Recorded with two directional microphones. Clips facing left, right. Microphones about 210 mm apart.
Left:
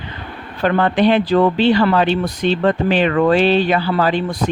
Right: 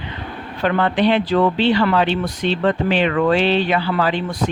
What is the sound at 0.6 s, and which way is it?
Speech, 45° left (ahead or behind).